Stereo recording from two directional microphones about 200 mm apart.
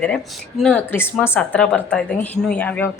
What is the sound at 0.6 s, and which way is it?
Speech, 10° left (ahead or behind).